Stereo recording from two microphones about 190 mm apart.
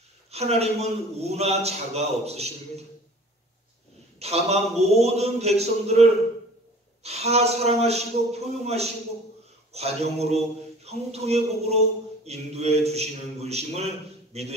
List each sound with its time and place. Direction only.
0.3 s a man's voice: 35° right (ahead or behind)
4.2 s a man's voice: 35° right (ahead or behind)